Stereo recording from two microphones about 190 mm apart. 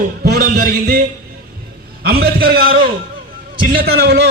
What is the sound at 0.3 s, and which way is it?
Speech, 55° right (ahead or behind).